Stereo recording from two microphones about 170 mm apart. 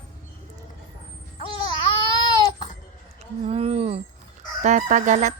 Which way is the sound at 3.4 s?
35° right (ahead or behind).